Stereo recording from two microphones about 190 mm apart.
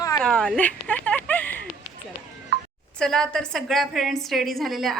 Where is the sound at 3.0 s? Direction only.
5° left (ahead or behind).